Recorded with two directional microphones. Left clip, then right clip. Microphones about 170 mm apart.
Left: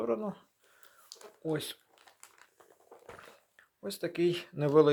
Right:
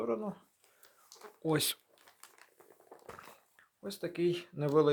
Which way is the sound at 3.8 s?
15° left (ahead or behind).